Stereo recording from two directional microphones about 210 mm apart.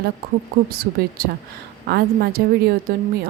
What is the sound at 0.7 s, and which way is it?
A woman's voice, 45° right (ahead or behind).